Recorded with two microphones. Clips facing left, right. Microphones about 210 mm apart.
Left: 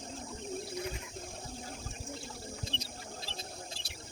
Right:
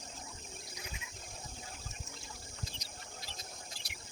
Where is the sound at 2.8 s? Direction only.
30° left (ahead or behind).